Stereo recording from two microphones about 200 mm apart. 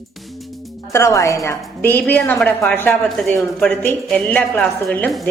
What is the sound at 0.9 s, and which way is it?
A woman's voice, 15° left (ahead or behind).